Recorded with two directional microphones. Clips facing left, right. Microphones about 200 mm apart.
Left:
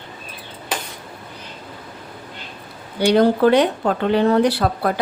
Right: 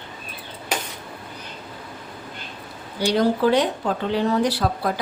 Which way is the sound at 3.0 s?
60° left (ahead or behind).